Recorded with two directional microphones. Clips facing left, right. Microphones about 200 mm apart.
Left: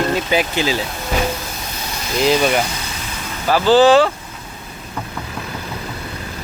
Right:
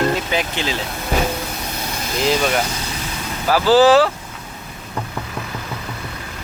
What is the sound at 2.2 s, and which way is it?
Speech, 5° left (ahead or behind).